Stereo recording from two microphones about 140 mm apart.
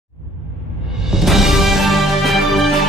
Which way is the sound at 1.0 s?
Centre (ahead or behind).